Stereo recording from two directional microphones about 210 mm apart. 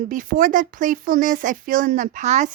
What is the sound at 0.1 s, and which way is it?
Speech, 40° right (ahead or behind).